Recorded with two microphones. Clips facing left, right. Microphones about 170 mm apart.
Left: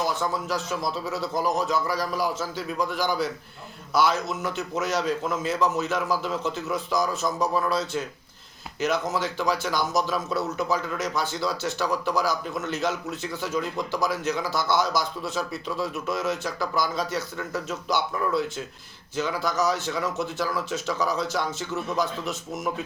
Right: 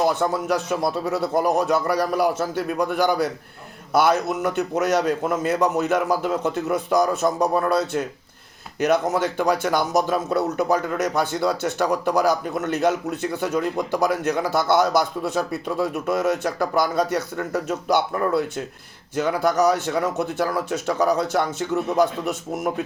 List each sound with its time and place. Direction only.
0.0 s speech: 60° right (ahead or behind)